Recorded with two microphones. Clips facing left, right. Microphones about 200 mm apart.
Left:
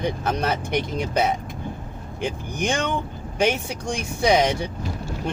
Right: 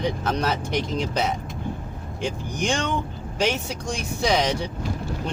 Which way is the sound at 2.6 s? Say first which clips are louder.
Left 1 dB; 55° left (ahead or behind).